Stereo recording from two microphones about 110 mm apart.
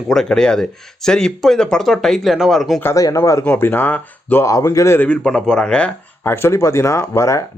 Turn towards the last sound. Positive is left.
turn(degrees=25)  # may be behind; listen again after turning